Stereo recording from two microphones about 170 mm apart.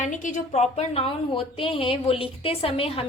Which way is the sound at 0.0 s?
45° left (ahead or behind).